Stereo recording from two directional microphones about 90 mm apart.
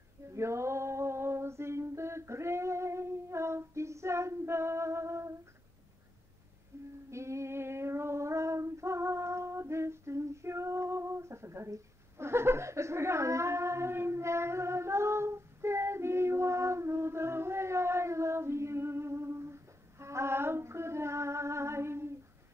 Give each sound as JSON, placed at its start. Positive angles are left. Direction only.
{"t": 0.3, "sound": "a sound", "side_deg": -30}
{"t": 6.7, "sound": "humming", "side_deg": -30}
{"t": 7.1, "sound": "female singing", "side_deg": -30}